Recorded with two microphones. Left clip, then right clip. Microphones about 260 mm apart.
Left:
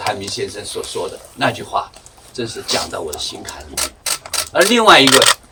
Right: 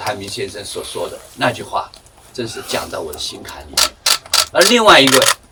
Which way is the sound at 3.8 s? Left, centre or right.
Right.